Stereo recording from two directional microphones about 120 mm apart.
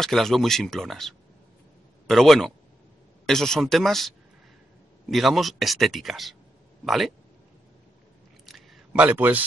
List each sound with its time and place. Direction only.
0.0 s speech: 5° left (ahead or behind)
5.1 s speech: centre (ahead or behind)
8.5 s a sound: centre (ahead or behind)
9.0 s a man's voice: 15° right (ahead or behind)